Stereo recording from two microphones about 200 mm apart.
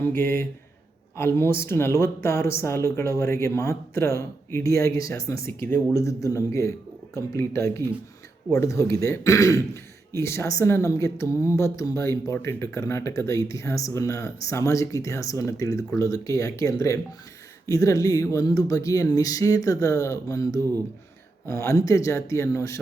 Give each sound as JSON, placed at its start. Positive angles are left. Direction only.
{"t": 0.0, "sound": "speech", "side_deg": 10}